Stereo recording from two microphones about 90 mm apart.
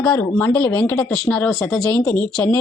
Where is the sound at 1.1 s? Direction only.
5° left (ahead or behind).